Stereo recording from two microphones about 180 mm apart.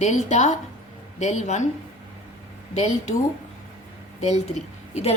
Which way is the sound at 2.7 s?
40° left (ahead or behind).